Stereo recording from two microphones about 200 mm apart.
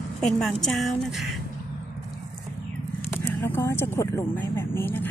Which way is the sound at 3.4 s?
15° left (ahead or behind).